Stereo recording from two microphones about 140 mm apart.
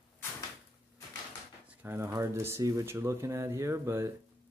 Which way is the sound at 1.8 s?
20° right (ahead or behind).